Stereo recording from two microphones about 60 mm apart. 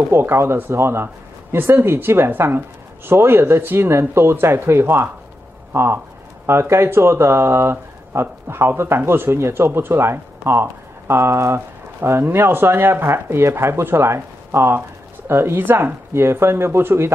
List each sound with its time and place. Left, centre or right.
0.1 s speech: right